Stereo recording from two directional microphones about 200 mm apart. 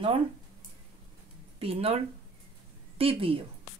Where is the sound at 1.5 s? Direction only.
30° right (ahead or behind).